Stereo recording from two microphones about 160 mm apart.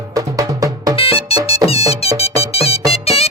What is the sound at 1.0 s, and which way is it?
Music, 35° left (ahead or behind).